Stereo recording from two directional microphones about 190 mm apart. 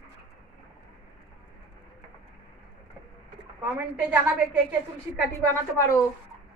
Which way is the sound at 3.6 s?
5° right (ahead or behind).